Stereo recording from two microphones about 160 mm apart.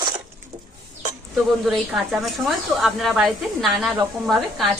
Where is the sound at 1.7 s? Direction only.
Centre (ahead or behind).